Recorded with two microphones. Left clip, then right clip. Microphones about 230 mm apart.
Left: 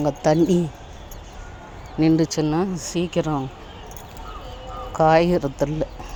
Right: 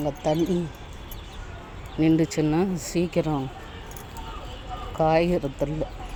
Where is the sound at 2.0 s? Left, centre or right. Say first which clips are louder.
Left 3 dB; centre.